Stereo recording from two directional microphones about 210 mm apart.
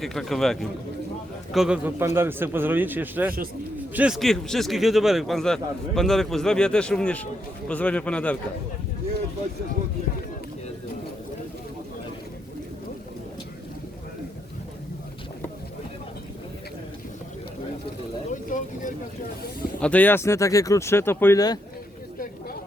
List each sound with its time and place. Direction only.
0.0 s a man's voice: centre (ahead or behind)
18.3 s vehicle: 40° left (ahead or behind)
19.8 s speech: 5° left (ahead or behind)